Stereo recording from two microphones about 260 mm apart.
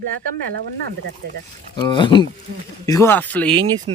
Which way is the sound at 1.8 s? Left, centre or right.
Centre.